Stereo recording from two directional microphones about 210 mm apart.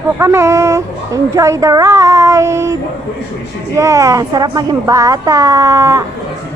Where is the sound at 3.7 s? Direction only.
15° right (ahead or behind).